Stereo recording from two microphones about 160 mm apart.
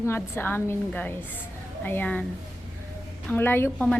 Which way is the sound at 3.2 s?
10° left (ahead or behind).